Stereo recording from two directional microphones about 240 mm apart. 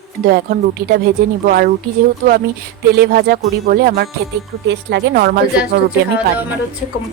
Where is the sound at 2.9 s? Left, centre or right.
Right.